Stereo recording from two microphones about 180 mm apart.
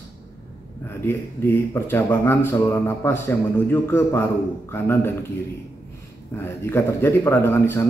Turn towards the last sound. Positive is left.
turn(degrees=15)  # may be behind; listen again after turning